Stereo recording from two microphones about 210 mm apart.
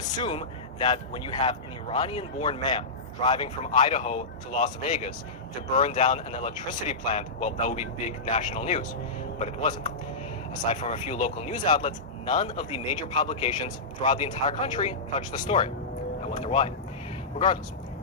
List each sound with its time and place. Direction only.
0.1 s speech: 25° left (ahead or behind)